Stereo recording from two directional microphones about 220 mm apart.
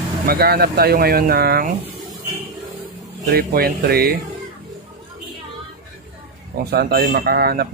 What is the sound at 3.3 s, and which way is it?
Speech, 45° right (ahead or behind).